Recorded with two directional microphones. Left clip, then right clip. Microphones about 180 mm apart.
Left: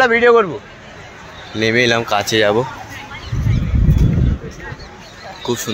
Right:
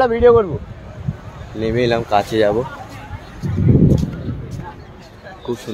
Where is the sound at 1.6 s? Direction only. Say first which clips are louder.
Left 3 dB; 5° left (ahead or behind).